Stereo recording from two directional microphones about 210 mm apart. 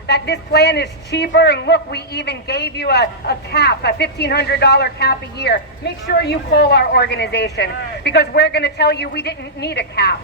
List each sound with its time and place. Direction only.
0.1 s speech: 50° left (ahead or behind)